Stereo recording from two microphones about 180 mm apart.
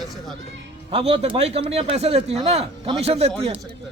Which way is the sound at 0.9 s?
30° right (ahead or behind).